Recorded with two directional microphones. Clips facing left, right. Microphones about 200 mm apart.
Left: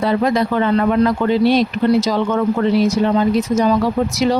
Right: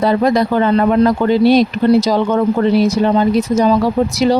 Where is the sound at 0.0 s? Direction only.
40° right (ahead or behind).